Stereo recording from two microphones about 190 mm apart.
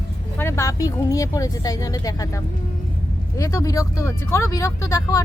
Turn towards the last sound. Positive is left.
turn(degrees=15)  # may be behind; listen again after turning